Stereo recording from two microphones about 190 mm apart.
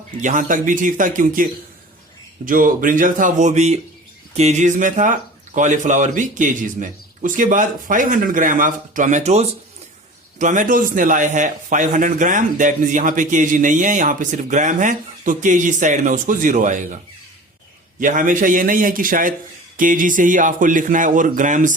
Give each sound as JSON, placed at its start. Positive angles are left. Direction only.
{"t": 0.2, "sound": "a man's voice", "side_deg": -40}
{"t": 4.4, "sound": "a sound", "side_deg": -35}
{"t": 5.5, "sound": "a man's voice", "side_deg": -40}
{"t": 18.0, "sound": "a man's voice", "side_deg": -45}